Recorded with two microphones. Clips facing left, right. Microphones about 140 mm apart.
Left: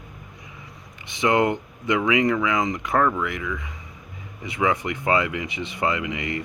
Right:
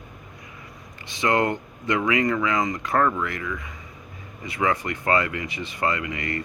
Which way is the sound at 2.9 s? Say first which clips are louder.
Left 1 dB; 5° left (ahead or behind).